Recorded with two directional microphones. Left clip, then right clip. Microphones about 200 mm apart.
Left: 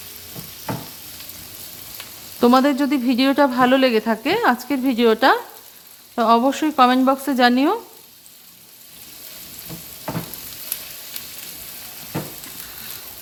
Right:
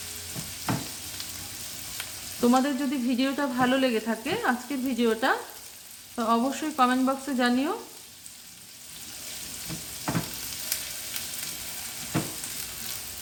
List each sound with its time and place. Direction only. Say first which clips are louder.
2.4 s speech: left 9 dB; 55° left (ahead or behind)